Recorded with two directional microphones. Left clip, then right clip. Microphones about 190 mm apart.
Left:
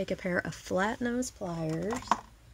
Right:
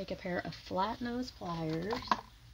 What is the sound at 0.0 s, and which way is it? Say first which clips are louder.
Speech: left 6 dB; 40° left (ahead or behind).